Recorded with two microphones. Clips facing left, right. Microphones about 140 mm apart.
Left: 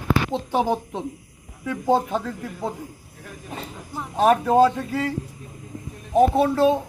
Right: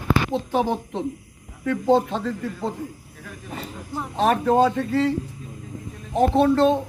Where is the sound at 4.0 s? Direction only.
5° left (ahead or behind).